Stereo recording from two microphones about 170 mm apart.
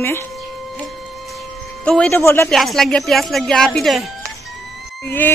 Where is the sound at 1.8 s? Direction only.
5° left (ahead or behind).